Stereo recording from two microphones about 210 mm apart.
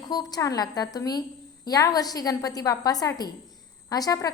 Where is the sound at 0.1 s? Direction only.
20° left (ahead or behind).